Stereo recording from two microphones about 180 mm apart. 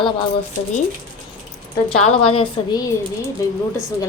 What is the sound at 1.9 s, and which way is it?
Speech, 30° left (ahead or behind).